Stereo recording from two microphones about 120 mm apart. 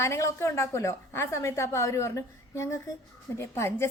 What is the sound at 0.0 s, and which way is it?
A woman's voice, 20° left (ahead or behind).